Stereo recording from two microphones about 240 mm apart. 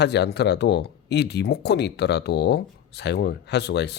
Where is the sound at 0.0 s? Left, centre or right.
Left.